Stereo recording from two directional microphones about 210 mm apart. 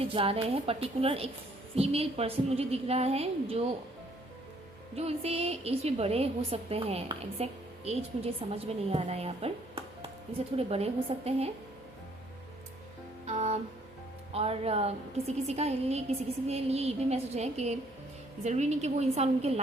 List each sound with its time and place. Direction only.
0.0 s a woman's voice: 25° right (ahead or behind)
4.9 s a woman's voice: 30° right (ahead or behind)
13.2 s a woman's voice: 30° right (ahead or behind)